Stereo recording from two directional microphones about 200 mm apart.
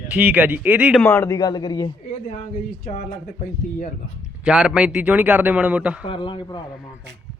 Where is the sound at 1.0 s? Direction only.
10° left (ahead or behind).